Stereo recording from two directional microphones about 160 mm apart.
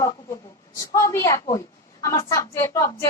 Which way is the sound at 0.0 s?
20° left (ahead or behind).